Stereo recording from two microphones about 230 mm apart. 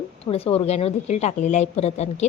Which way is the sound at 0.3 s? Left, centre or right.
Left.